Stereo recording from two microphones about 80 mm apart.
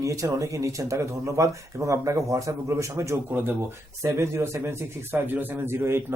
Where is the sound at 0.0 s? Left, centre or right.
Right.